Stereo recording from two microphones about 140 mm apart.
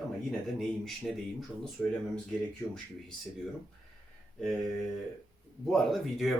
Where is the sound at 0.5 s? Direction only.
Centre (ahead or behind).